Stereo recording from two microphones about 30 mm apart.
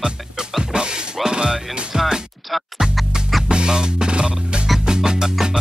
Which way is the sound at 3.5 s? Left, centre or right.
Right.